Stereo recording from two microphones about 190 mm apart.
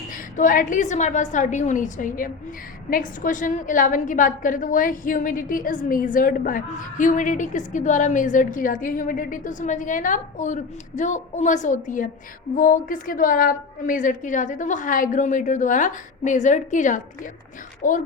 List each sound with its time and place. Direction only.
0.1 s a woman's voice: 45° left (ahead or behind)